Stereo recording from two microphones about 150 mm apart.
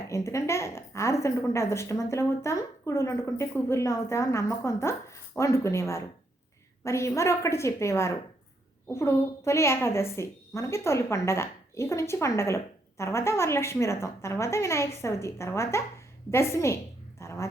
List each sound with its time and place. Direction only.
0.1 s a woman's voice: 20° left (ahead or behind)